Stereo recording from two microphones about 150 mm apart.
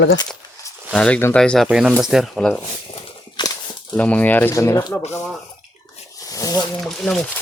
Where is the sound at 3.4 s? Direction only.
30° left (ahead or behind).